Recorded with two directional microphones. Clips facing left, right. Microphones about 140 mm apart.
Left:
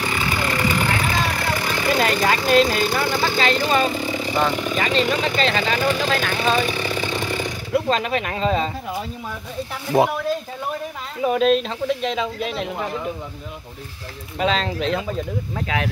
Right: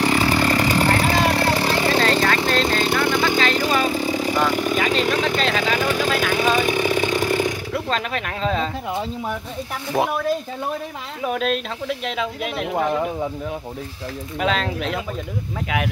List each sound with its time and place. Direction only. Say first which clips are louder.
0.0 s a sound: right 6 dB; 35° right (ahead or behind)
2.2 s vehicle: left 3 dB; 10° left (ahead or behind)
4.3 s speech: even; centre (ahead or behind)
5.9 s vehicle: right 2 dB; 5° right (ahead or behind)
7.7 s speech: left 4 dB; centre (ahead or behind)
11.2 s speech: left 5 dB; centre (ahead or behind)
12.7 s speech: right 6 dB; 65° right (ahead or behind)
14.4 s speech: left 1 dB; 5° right (ahead or behind)